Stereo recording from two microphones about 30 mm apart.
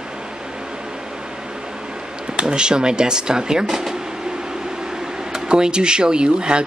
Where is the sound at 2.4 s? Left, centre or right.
Right; by 3.9 s centre.